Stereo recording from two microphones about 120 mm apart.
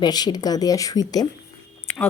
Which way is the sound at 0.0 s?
35° left (ahead or behind).